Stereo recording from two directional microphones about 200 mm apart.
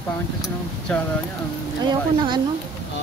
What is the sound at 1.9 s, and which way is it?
Speech, 25° right (ahead or behind).